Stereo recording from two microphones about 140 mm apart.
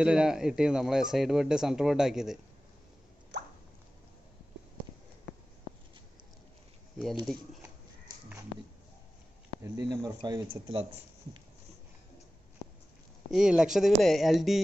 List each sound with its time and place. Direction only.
0.0 s speech: 5° right (ahead or behind)
9.6 s speech: 25° right (ahead or behind)
13.3 s speech: 5° right (ahead or behind)